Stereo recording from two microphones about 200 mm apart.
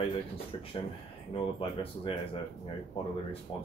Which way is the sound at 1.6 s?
25° left (ahead or behind).